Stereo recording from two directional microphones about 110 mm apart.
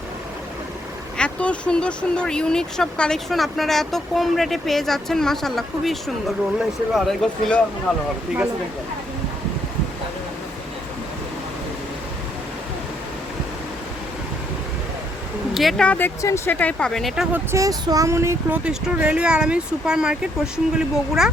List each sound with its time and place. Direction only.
1.2 s speech: 10° left (ahead or behind)
15.5 s speech: centre (ahead or behind)
15.9 s speech: 20° left (ahead or behind)
16.6 s speech: 10° left (ahead or behind)
17.3 s speech: 30° right (ahead or behind)
18.5 s speech: 10° right (ahead or behind)